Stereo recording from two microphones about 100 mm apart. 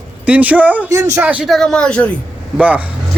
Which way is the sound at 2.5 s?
10° right (ahead or behind).